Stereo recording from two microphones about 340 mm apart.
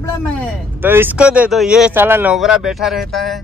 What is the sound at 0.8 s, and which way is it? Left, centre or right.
Speech, centre.